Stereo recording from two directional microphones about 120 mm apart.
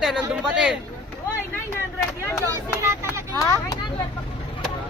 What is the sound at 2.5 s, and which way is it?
Speech, 25° right (ahead or behind).